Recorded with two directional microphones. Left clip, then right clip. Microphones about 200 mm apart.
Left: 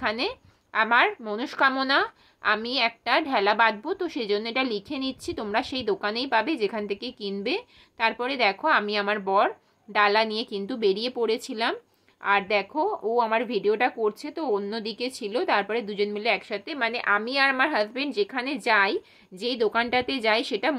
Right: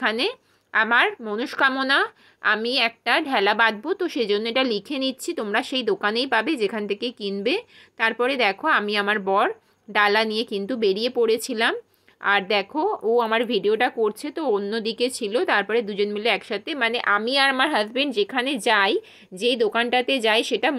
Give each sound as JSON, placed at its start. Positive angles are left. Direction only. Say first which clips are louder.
{"t": 0.0, "sound": "a woman's voice", "louder": "right 4 dB", "side_deg": -15}